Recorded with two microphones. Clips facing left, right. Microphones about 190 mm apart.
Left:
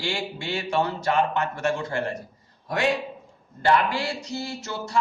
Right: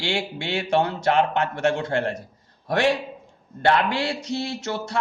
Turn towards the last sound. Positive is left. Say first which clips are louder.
# right 4 dB
turn(degrees=-75)  # may be behind; listen again after turning